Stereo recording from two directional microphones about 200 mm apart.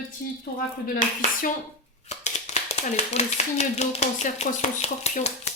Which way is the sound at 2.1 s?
35° left (ahead or behind).